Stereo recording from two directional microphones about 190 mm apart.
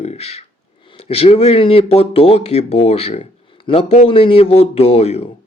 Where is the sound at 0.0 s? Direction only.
35° left (ahead or behind).